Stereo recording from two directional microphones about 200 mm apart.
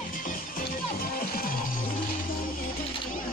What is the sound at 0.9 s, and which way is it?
Music, 45° left (ahead or behind).